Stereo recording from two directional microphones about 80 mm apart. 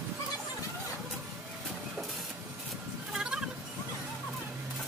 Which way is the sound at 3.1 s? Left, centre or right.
Centre.